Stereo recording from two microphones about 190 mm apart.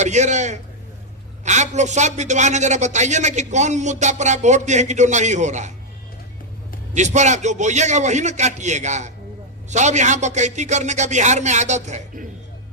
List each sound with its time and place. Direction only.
0.0 s a man's voice: 40° right (ahead or behind)
6.9 s a man's voice: 40° right (ahead or behind)